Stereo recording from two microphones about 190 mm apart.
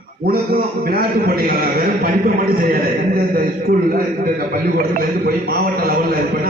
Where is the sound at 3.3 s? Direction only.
50° right (ahead or behind).